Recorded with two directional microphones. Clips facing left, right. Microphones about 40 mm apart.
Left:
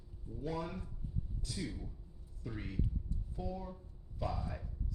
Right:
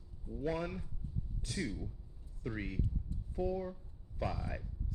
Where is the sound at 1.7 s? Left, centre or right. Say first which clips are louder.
Right 3 dB; centre.